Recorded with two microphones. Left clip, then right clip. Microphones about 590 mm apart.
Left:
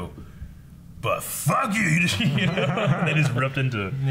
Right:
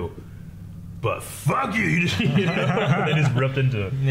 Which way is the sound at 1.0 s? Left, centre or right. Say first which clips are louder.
Left 1 dB; right.